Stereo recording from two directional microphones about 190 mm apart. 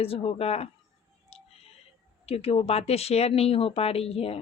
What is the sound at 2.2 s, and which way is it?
A woman's voice, 30° left (ahead or behind).